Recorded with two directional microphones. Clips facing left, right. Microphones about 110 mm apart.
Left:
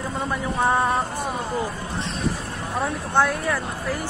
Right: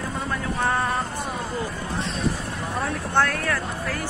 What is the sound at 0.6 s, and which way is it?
Vehicle, 20° left (ahead or behind).